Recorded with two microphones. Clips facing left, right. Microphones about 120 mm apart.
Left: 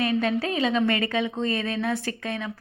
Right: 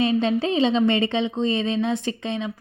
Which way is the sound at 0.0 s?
25° right (ahead or behind).